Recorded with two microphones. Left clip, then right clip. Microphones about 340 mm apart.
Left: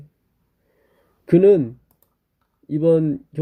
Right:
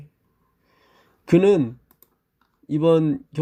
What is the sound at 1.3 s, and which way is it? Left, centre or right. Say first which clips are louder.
Speech: left 3 dB; centre.